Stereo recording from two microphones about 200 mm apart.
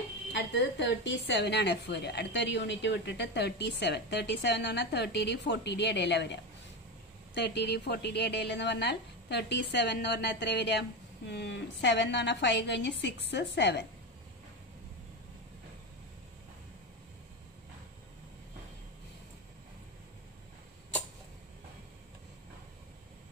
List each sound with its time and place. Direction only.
0.3 s a woman's voice: 60° left (ahead or behind)